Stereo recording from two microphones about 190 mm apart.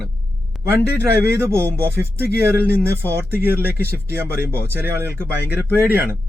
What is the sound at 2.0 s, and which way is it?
Speech, 55° left (ahead or behind).